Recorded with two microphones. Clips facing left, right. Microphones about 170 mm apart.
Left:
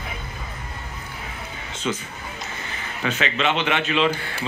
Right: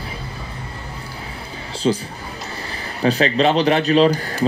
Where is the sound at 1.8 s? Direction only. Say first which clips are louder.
Right 8 dB; 35° right (ahead or behind).